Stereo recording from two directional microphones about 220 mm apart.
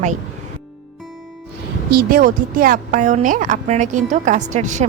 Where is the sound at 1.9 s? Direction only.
40° right (ahead or behind).